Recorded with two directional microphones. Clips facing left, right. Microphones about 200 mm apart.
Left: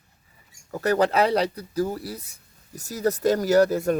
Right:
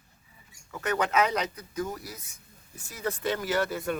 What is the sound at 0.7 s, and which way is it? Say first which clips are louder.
Speech: left 6 dB; 35° left (ahead or behind).